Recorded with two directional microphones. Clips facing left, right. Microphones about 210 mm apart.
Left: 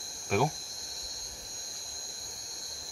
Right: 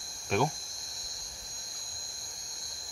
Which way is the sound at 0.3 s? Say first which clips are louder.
Left 1 dB; 5° left (ahead or behind).